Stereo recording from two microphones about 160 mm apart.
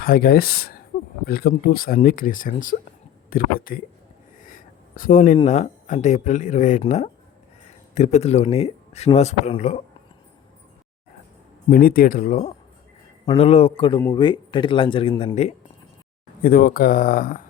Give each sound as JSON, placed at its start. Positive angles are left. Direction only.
{"t": 0.0, "sound": "speech", "side_deg": 70}
{"t": 4.4, "sound": "a sound", "side_deg": 60}
{"t": 5.5, "sound": "speech", "side_deg": 50}
{"t": 11.7, "sound": "speech", "side_deg": 65}
{"t": 13.3, "sound": "speech", "side_deg": 40}
{"t": 16.4, "sound": "speech", "side_deg": 60}